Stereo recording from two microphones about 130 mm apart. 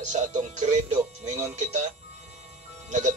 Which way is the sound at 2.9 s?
65° right (ahead or behind).